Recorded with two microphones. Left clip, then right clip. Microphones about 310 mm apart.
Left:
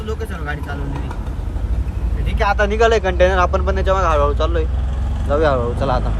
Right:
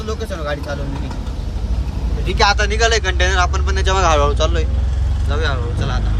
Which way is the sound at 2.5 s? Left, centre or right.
Centre.